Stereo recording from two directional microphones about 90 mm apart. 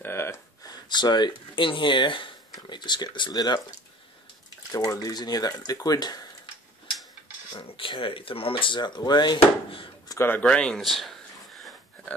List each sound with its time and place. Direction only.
0.0 s gasp: 30° left (ahead or behind)
0.7 s speech: 55° left (ahead or behind); by 2.3 s 70° left (ahead or behind)
2.5 s speech: 55° left (ahead or behind)
4.7 s speech: 40° left (ahead or behind)
7.5 s speech: 75° left (ahead or behind)
10.1 s speech: 25° left (ahead or behind)
10.4 s speech: 10° left (ahead or behind)
10.8 s a sound: centre (ahead or behind)